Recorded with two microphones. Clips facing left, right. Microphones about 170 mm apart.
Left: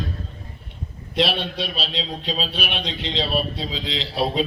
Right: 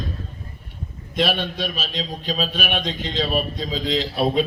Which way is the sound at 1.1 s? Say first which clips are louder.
Even; 50° right (ahead or behind).